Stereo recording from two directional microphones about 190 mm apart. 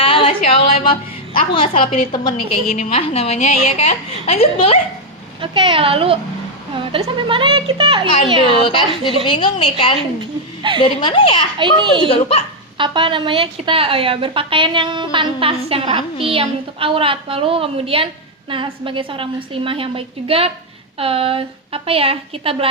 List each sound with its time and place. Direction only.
0.0 s a woman's voice: 30° left (ahead or behind)
5.4 s a woman's voice: 25° right (ahead or behind)
9.2 s a woman's voice: 25° left (ahead or behind)
11.6 s a woman's voice: 25° right (ahead or behind)
12.0 s a woman's voice: 30° left (ahead or behind)
12.7 s a woman's voice: 25° right (ahead or behind)